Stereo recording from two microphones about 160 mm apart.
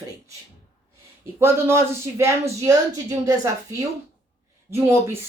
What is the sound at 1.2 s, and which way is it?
Speech, 15° right (ahead or behind).